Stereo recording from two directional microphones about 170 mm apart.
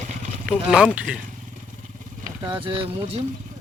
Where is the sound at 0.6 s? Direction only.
5° right (ahead or behind).